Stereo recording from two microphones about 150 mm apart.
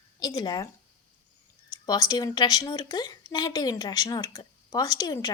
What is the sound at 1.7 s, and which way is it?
A woman's voice, 25° left (ahead or behind).